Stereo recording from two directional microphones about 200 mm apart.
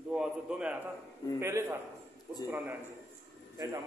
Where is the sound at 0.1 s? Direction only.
5° right (ahead or behind).